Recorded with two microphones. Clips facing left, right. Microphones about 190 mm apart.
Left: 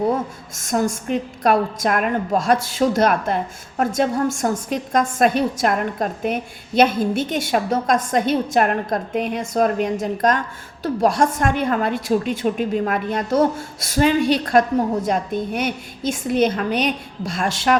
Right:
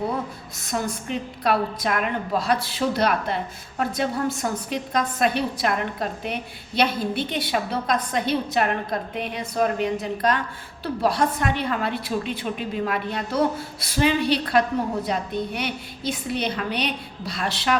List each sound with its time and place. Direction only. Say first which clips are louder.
0.5 s a woman's voice: left 7 dB; 45° left (ahead or behind)